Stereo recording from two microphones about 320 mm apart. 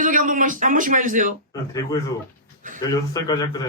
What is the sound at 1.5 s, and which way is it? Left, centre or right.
A man's voice, centre.